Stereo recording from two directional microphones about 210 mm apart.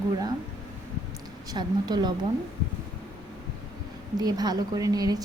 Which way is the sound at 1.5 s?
20° right (ahead or behind).